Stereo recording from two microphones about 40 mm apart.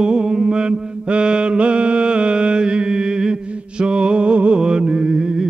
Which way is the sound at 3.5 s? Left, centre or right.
Right.